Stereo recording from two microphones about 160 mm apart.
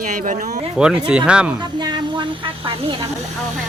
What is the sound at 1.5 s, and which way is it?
Snake, 25° right (ahead or behind).